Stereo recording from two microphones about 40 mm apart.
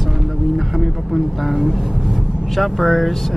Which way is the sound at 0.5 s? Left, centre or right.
Centre.